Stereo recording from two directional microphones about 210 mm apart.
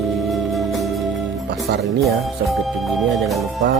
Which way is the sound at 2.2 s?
Centre (ahead or behind).